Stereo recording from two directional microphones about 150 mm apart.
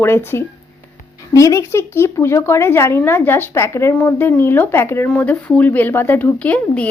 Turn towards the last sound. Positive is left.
turn(degrees=10)  # may be behind; listen again after turning